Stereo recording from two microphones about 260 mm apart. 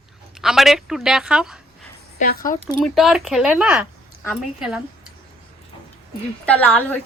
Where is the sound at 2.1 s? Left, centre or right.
Left.